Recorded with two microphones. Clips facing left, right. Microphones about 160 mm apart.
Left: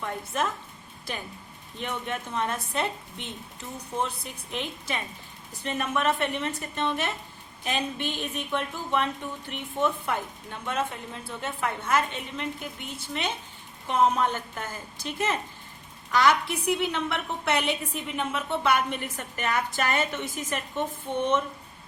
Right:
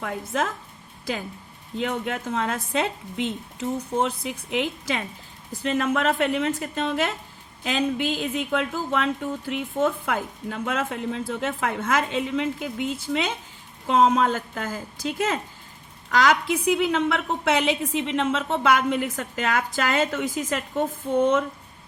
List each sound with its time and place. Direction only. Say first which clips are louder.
0.3 s a woman's voice: right 3 dB; 90° right
1.8 s a woman's voice: right 5 dB; 90° right